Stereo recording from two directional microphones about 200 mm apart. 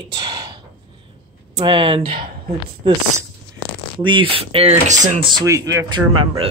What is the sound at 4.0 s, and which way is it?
Speech, 25° right (ahead or behind).